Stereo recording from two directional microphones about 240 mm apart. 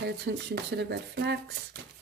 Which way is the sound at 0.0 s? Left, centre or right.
Right.